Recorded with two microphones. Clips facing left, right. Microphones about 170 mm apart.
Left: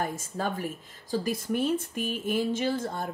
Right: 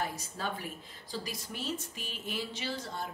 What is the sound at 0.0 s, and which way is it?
Speech, 50° left (ahead or behind).